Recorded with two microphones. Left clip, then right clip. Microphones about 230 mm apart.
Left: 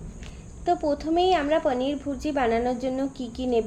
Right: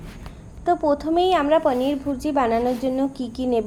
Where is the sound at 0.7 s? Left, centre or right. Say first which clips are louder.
Right 4 dB; centre.